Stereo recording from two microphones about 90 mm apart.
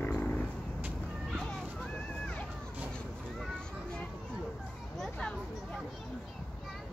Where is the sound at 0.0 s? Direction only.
15° left (ahead or behind).